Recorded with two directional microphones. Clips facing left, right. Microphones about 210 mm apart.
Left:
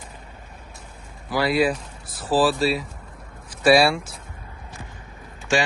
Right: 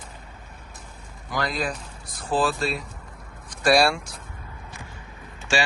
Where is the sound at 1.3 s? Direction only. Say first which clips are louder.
Left 7 dB; 5° left (ahead or behind).